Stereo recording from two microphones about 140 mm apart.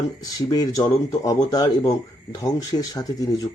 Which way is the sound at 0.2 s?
25° left (ahead or behind).